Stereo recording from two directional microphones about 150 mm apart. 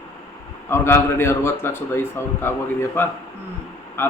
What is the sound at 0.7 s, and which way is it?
A man's voice, 15° left (ahead or behind).